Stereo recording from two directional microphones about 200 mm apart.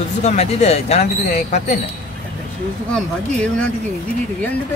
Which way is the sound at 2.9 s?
5° left (ahead or behind).